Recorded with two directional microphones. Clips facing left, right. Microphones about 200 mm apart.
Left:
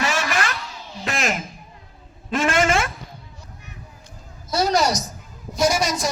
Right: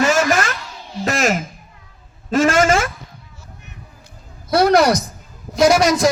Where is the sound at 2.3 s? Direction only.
45° right (ahead or behind).